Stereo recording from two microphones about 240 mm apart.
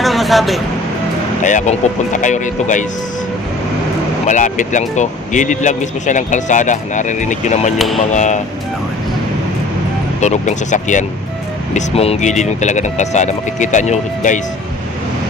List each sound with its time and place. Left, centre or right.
0.0 s vehicle: centre
1.4 s speech: left
4.3 s speech: left
10.2 s speech: left